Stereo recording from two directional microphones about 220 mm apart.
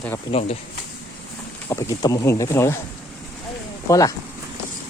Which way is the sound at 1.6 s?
15° left (ahead or behind).